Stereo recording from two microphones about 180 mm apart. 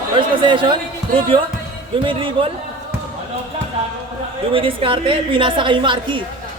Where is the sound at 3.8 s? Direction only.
35° right (ahead or behind).